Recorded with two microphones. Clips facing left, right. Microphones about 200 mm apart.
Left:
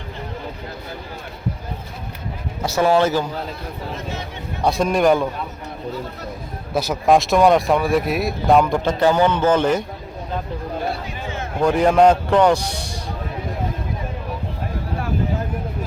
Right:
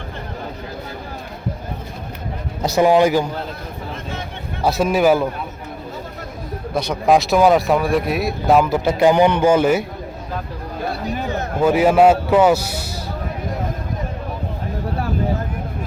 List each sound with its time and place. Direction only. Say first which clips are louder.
2.6 s speech: right 3 dB; 15° right (ahead or behind)
4.6 s speech: right 1 dB; 5° right (ahead or behind)
6.7 s speech: even; 5° left (ahead or behind)
11.6 s speech: right 1 dB; 5° right (ahead or behind)